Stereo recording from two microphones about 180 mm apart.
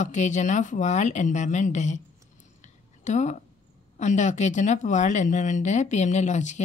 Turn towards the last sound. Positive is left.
turn(degrees=40)  # may be behind; listen again after turning